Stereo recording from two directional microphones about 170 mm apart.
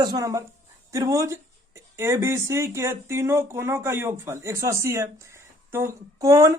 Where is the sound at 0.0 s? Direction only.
20° right (ahead or behind).